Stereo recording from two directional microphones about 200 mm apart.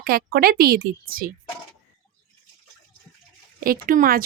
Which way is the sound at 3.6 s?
45° right (ahead or behind).